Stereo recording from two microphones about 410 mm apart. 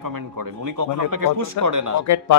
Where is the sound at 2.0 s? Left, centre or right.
Left.